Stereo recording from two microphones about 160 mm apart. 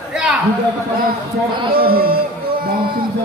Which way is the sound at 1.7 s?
70° right (ahead or behind).